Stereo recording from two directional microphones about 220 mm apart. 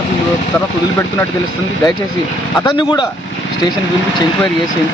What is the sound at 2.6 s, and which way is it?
Speech, 20° left (ahead or behind).